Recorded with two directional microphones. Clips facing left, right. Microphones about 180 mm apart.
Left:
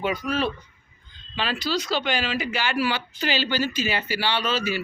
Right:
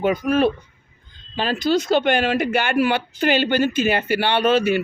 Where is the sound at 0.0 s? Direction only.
50° right (ahead or behind).